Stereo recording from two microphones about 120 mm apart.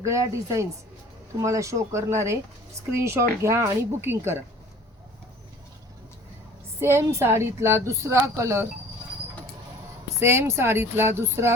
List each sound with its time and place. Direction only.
0.0 s a woman's voice: 25° right (ahead or behind)
6.7 s a woman's voice: 20° right (ahead or behind)
10.2 s a woman's voice: 20° right (ahead or behind)